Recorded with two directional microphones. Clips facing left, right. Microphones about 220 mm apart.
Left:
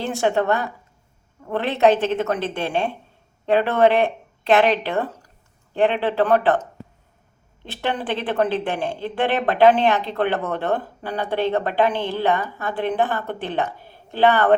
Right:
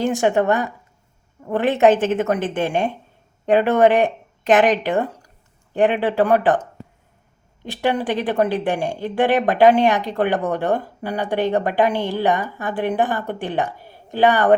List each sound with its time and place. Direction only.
0.0 s speech: 15° right (ahead or behind)